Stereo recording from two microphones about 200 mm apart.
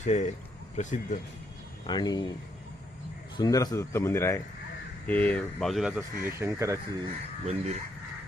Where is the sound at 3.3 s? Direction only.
20° left (ahead or behind); by 6.8 s 15° right (ahead or behind).